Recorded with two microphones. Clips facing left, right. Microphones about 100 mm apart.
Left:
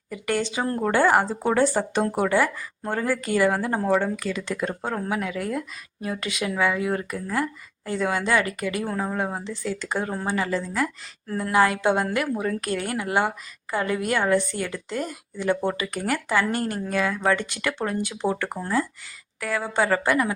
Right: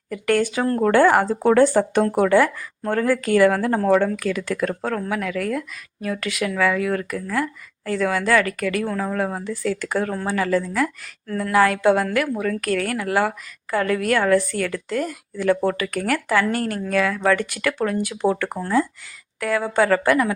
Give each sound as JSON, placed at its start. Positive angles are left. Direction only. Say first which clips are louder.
{"t": 0.1, "sound": "a woman's voice", "louder": "right 6 dB", "side_deg": 10}
{"t": 4.4, "sound": "a woman's voice", "louder": "right 4 dB", "side_deg": 25}
{"t": 11.3, "sound": "speech", "louder": "right 3 dB", "side_deg": 25}
{"t": 11.5, "sound": "a woman's voice", "louder": "right 4 dB", "side_deg": 15}
{"t": 19.4, "sound": "a woman's voice", "louder": "right 5 dB", "side_deg": 5}